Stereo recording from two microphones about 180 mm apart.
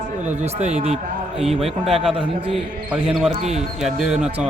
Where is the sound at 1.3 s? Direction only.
Centre (ahead or behind).